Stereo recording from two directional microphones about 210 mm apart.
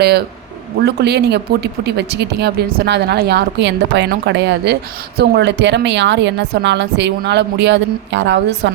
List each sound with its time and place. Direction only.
0.9 s speech: 50° right (ahead or behind)